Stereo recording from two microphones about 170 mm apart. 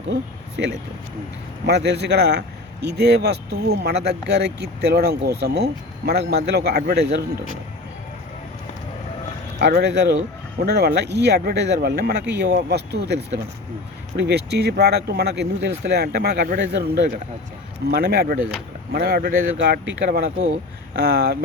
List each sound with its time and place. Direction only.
0.1 s speech: 90° right
1.6 s speech: 80° right
9.6 s speech: 75° right (ahead or behind)
14.2 s speech: 75° right (ahead or behind)